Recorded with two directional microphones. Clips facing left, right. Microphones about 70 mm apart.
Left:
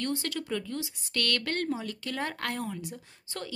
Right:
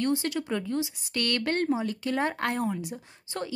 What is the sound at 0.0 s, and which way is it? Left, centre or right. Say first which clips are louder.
Speech: right 5 dB; centre.